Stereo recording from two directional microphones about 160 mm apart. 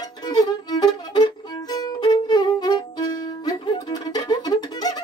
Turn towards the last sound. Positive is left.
turn(degrees=25)  # may be behind; listen again after turning